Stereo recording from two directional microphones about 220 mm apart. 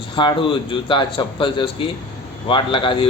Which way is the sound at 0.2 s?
20° left (ahead or behind).